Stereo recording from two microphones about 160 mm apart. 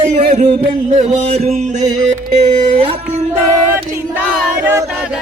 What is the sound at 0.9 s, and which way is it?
A man's voice, 45° right (ahead or behind).